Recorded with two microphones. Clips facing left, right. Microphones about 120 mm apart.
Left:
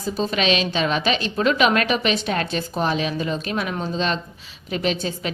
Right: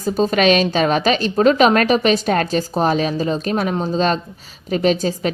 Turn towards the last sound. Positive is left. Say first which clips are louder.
# right 7 dB
turn(degrees=-40)  # may be behind; listen again after turning